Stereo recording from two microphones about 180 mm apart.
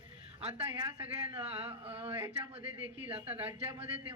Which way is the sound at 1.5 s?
30° right (ahead or behind).